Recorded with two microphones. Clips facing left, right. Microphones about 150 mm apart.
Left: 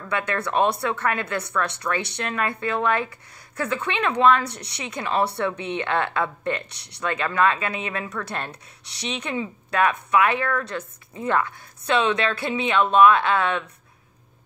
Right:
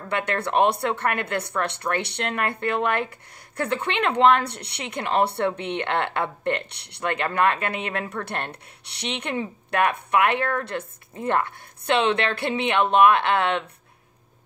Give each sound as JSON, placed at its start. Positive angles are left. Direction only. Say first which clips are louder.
{"t": 0.1, "sound": "speech", "louder": "right 1 dB", "side_deg": -60}